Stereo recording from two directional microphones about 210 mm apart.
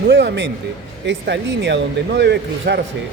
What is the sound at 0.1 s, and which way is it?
Speech, 55° right (ahead or behind).